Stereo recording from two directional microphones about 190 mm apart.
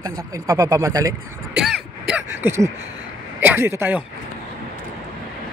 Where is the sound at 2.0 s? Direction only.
10° right (ahead or behind).